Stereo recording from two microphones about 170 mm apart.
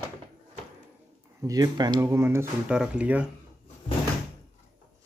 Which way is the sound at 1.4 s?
20° right (ahead or behind).